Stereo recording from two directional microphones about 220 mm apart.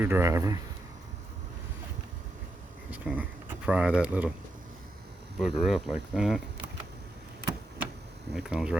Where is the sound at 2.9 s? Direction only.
5° right (ahead or behind).